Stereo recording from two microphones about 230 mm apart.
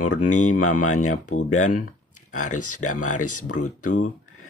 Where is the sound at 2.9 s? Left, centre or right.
Left.